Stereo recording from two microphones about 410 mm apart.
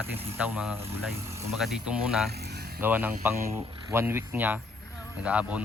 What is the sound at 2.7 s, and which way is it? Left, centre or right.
Speech, centre.